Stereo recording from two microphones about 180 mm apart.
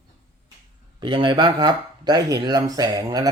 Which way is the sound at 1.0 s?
25° right (ahead or behind).